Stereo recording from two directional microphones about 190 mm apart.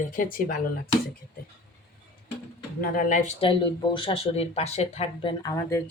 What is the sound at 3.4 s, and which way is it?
Speech, 25° left (ahead or behind).